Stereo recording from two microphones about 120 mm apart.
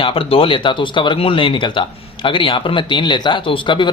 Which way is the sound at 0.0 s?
50° left (ahead or behind).